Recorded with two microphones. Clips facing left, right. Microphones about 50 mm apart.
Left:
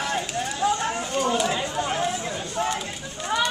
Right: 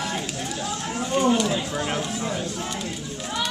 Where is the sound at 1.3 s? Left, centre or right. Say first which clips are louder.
Right 1 dB; centre.